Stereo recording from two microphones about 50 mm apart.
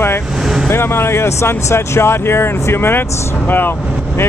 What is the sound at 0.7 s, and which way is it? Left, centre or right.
Speech, left.